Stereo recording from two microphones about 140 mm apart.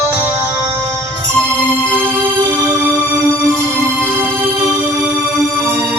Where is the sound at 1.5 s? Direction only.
15° right (ahead or behind).